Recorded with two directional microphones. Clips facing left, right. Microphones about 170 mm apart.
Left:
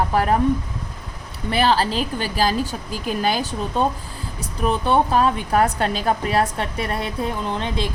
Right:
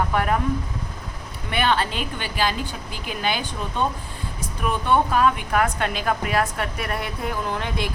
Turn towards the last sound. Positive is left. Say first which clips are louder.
# left 2 dB
turn(degrees=25)  # may be behind; listen again after turning